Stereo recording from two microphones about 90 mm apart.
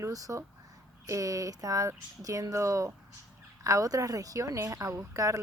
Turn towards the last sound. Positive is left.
turn(degrees=-35)  # may be behind; listen again after turning